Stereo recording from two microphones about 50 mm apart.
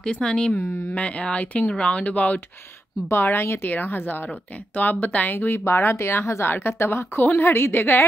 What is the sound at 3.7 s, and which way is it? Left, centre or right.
A woman's voice, left.